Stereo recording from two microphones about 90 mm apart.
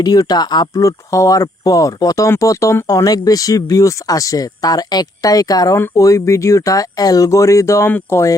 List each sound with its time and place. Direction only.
0.0 s speech: 50° left (ahead or behind)
0.8 s speech: 35° left (ahead or behind)
7.9 s speech: 20° left (ahead or behind)